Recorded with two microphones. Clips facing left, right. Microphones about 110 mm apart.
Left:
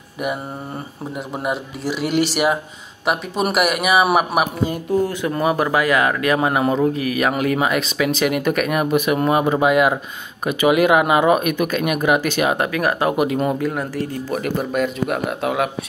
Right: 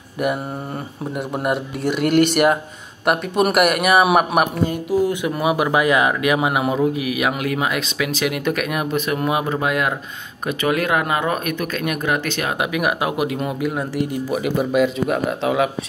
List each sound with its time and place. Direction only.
1.1 s speech: centre (ahead or behind)
5.0 s speech: 15° right (ahead or behind)
8.9 s speech: 10° left (ahead or behind)
9.2 s speech: centre (ahead or behind)
12.5 s speech: 10° right (ahead or behind)
14.3 s speech: 5° right (ahead or behind)